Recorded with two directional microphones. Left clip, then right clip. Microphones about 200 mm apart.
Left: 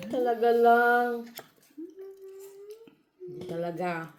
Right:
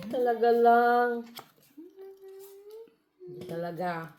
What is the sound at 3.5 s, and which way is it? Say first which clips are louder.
Speech: left 1 dB; 30° left (ahead or behind).